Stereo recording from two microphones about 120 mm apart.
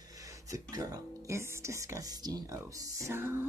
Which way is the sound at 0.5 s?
30° right (ahead or behind).